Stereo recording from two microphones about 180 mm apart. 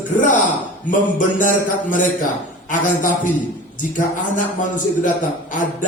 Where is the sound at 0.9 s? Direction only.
50° left (ahead or behind).